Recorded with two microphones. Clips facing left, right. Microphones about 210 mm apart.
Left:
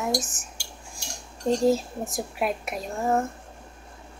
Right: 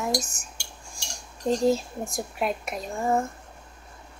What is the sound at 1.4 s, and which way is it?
Speech, centre (ahead or behind).